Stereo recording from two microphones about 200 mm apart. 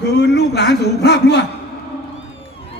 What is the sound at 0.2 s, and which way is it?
A man's voice, 55° left (ahead or behind).